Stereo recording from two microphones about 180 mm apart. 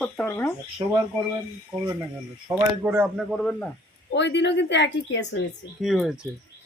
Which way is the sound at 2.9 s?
5° right (ahead or behind).